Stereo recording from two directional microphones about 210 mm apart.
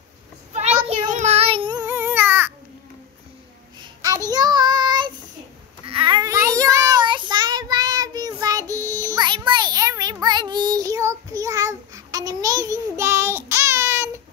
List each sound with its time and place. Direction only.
0.5 s a sound: 30° right (ahead or behind)
0.8 s child singing: 30° right (ahead or behind); by 2.5 s 10° right (ahead or behind)
3.8 s child singing: 15° right (ahead or behind)